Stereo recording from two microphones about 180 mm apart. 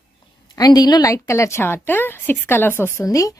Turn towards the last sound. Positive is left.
turn(degrees=20)  # may be behind; listen again after turning